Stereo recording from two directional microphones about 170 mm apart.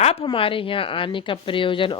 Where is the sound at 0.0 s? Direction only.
35° left (ahead or behind).